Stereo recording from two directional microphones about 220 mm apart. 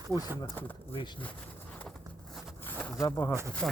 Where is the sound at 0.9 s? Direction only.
25° left (ahead or behind).